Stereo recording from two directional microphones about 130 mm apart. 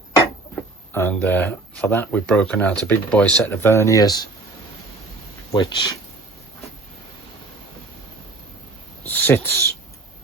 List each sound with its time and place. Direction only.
1.1 s speech: 10° left (ahead or behind); by 4.3 s 30° left (ahead or behind)
5.5 s speech: 35° left (ahead or behind)
9.0 s speech: 15° left (ahead or behind)